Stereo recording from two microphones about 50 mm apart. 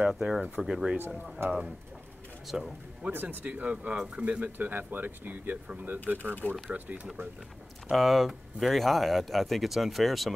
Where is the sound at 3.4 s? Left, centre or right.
Right.